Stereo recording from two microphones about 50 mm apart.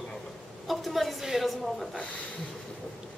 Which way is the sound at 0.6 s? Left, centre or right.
Centre.